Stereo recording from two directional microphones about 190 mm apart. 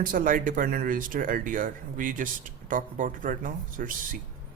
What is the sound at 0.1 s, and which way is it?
Speech, 50° right (ahead or behind).